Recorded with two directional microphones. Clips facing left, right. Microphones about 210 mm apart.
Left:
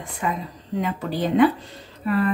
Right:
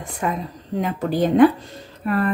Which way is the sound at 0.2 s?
50° right (ahead or behind).